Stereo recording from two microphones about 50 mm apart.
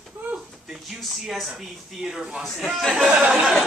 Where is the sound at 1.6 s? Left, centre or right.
Centre.